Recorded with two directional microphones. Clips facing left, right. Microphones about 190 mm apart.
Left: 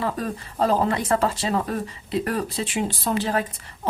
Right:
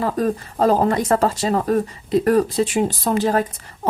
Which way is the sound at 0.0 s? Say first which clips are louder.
Right 6 dB; 40° right (ahead or behind).